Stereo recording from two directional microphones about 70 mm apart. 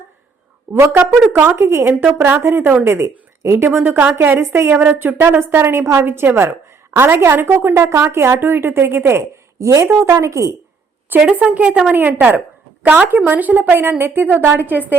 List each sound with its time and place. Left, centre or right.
0.7 s a woman's voice: right
4.7 s a woman's voice: right
11.3 s a woman's voice: right